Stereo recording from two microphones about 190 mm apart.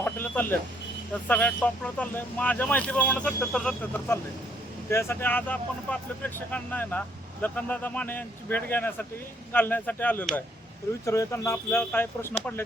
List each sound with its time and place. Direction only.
0.0 s vehicle: 10° left (ahead or behind)
1.3 s speech: 5° left (ahead or behind)